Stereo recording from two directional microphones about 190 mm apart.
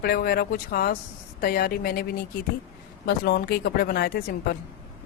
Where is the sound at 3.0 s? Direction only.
55° left (ahead or behind).